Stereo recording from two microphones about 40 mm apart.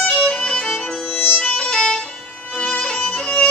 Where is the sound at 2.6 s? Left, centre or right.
Centre.